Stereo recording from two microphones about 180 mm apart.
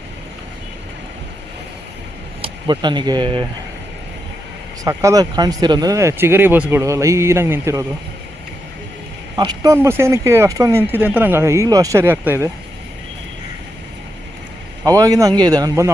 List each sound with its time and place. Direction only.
2.4 s speech: 25° right (ahead or behind)
4.8 s speech: 20° right (ahead or behind)
9.3 s speech: 25° right (ahead or behind)
14.8 s speech: 20° right (ahead or behind)